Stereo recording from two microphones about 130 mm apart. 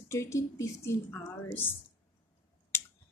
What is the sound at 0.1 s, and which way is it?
Speech, 20° left (ahead or behind).